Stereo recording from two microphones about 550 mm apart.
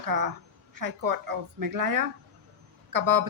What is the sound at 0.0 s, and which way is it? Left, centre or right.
A woman's voice, right.